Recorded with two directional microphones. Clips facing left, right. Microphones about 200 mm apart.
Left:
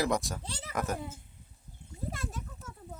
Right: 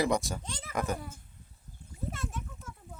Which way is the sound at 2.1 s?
40° left (ahead or behind).